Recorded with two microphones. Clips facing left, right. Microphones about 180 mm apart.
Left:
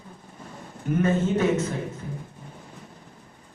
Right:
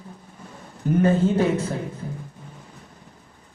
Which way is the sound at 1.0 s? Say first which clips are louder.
Right 3 dB; 35° right (ahead or behind).